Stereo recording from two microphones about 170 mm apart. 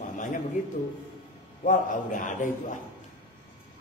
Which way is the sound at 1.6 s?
50° left (ahead or behind).